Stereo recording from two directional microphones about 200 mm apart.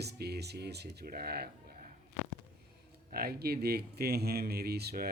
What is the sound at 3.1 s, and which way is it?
Speech, 50° right (ahead or behind).